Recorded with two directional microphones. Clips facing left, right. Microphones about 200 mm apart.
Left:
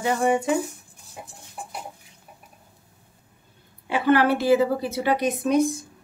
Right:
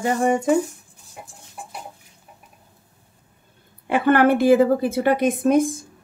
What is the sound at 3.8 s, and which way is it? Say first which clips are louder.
A woman's voice: right 3 dB; 55° right (ahead or behind).